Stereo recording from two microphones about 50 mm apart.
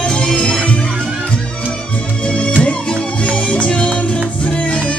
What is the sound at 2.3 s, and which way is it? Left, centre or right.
Music, centre.